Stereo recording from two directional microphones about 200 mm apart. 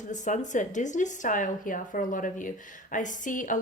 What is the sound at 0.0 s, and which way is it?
A woman's voice, 40° left (ahead or behind).